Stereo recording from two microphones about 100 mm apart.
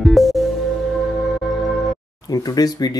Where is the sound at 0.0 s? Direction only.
Centre (ahead or behind).